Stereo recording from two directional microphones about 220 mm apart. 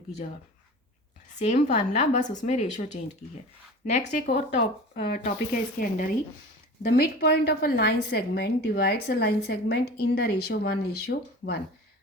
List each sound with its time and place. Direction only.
1.4 s speech: 30° left (ahead or behind)
4.3 s a woman's voice: 50° left (ahead or behind)
5.5 s a woman's voice: 40° left (ahead or behind)